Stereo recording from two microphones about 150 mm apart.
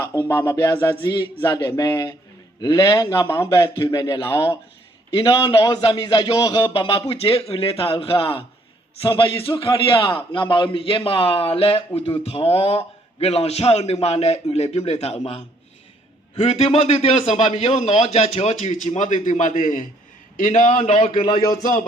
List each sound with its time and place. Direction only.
0.0 s music: 20° left (ahead or behind)
0.9 s a man's voice: 30° left (ahead or behind)
1.6 s a man's voice: 20° left (ahead or behind); by 21.2 s 40° left (ahead or behind)
21.6 s speech: 65° left (ahead or behind)